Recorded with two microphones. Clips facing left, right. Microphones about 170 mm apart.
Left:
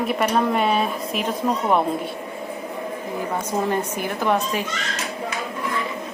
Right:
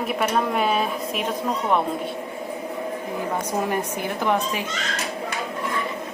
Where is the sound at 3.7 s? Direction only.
15° right (ahead or behind).